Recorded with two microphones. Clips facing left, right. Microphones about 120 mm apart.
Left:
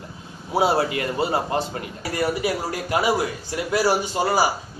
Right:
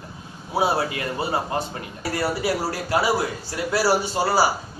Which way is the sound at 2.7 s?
20° left (ahead or behind).